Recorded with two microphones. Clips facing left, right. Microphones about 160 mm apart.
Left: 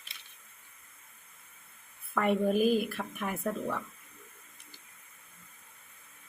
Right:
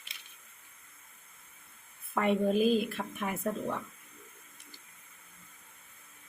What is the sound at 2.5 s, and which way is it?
Speech, 10° left (ahead or behind).